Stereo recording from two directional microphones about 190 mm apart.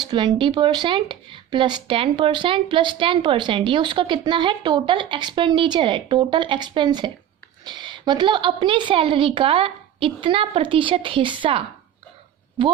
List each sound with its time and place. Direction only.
0.1 s speech: 25° right (ahead or behind)